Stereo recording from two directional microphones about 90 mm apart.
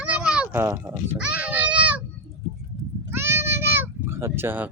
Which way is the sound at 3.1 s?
30° right (ahead or behind).